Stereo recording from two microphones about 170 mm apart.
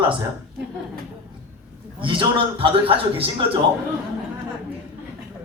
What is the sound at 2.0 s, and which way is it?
A man's voice, 30° right (ahead or behind).